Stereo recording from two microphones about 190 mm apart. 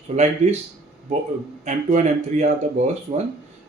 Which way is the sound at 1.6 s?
40° right (ahead or behind).